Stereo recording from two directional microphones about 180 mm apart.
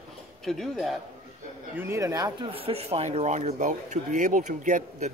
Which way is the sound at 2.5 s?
30° right (ahead or behind).